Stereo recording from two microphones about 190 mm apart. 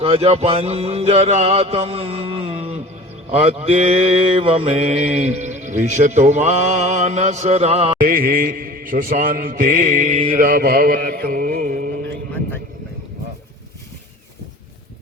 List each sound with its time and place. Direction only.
0.0 s mantra: 30° right (ahead or behind)
7.9 s mantra: 50° right (ahead or behind)